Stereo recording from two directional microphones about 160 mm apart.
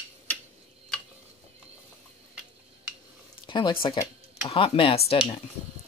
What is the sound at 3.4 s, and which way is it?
Speech, 30° left (ahead or behind).